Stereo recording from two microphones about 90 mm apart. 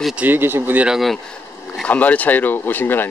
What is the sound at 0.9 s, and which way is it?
Speech, centre (ahead or behind).